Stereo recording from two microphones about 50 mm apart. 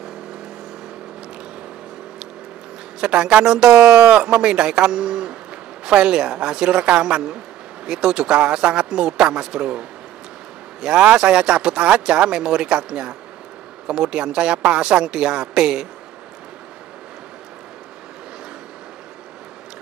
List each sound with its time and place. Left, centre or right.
3.0 s speech: centre